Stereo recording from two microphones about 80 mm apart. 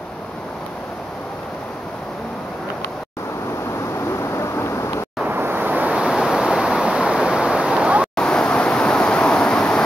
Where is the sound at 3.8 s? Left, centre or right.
Left.